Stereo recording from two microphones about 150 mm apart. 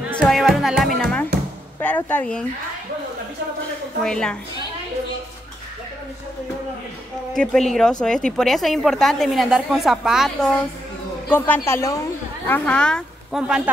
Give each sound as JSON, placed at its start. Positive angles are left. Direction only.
{"t": 0.1, "sound": "a man's voice", "side_deg": 0}
{"t": 4.0, "sound": "a woman's voice", "side_deg": 5}
{"t": 7.3, "sound": "a woman's voice", "side_deg": 5}
{"t": 11.2, "sound": "a man's voice", "side_deg": 10}